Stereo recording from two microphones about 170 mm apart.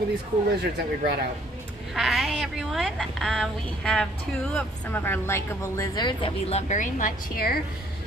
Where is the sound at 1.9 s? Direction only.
Centre (ahead or behind).